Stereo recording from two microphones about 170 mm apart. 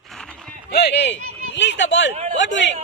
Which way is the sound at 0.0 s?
Centre (ahead or behind).